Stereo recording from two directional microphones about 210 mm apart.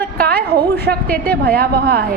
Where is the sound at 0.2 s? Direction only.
45° right (ahead or behind).